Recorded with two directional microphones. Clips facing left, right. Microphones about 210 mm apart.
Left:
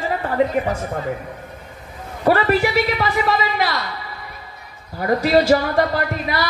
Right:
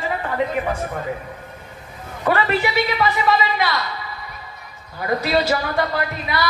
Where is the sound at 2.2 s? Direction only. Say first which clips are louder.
Left 3 dB; 40° left (ahead or behind).